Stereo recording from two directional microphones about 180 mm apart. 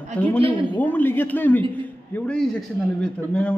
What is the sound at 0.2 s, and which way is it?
A man's voice, 5° left (ahead or behind).